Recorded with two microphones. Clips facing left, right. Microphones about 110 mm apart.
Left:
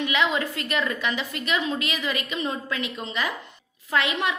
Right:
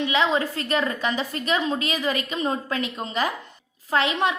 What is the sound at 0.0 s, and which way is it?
A woman's voice, 30° right (ahead or behind).